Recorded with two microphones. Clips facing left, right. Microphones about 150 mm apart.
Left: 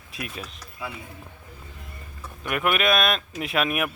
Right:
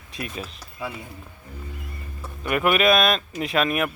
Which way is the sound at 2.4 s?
Centre (ahead or behind).